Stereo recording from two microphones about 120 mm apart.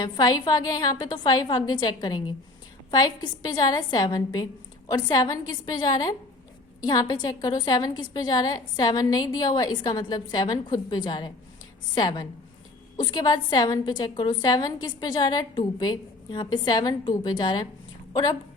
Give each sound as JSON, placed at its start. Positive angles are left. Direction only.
{"t": 0.0, "sound": "a woman's voice", "side_deg": 35}